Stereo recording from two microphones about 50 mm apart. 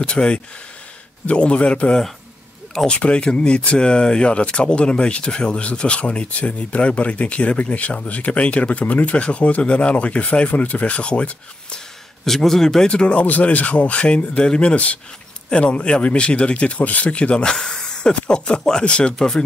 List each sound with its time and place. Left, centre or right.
0.0 s speech: centre
12.3 s a man's voice: centre
12.8 s speech: centre